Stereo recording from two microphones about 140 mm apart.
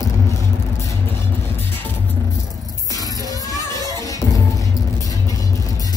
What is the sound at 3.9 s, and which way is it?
Music, 25° left (ahead or behind).